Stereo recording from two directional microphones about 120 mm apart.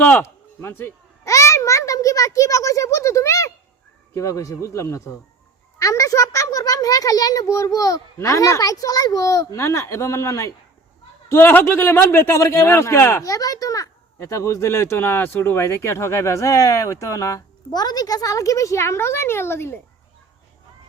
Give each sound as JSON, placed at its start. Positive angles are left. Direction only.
{"t": 0.0, "sound": "a child's voice", "side_deg": 15}